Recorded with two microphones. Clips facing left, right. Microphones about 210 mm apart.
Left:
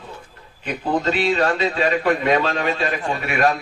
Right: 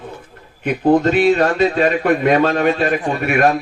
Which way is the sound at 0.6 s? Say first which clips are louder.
Right 8 dB; 55° right (ahead or behind).